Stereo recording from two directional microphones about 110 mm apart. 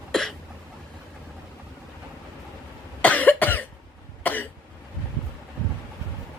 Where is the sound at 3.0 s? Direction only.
15° left (ahead or behind).